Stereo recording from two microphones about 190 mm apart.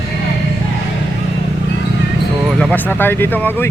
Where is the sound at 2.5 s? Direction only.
5° left (ahead or behind).